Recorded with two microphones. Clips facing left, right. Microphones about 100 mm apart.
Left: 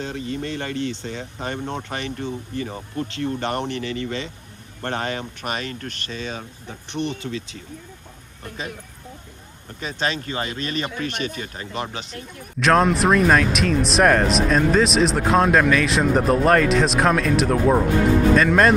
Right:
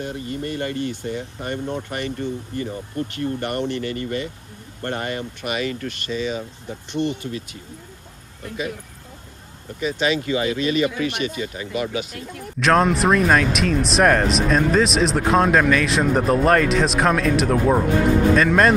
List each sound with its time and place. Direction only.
0.0 s speech: 90° left; by 2.1 s 65° left (ahead or behind)
3.2 s speech: 75° left (ahead or behind)
4.8 s speech: 70° left (ahead or behind)
5.4 s speech: 40° left (ahead or behind)
7.0 s speech: 20° left (ahead or behind)
9.8 s speech: 40° left (ahead or behind)
11.2 s speech: 55° left (ahead or behind)
11.7 s speech: 30° left (ahead or behind)
12.5 s speech: centre (ahead or behind)